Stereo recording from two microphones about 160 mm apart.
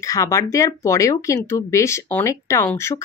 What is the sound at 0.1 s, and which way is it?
Speech, 20° left (ahead or behind).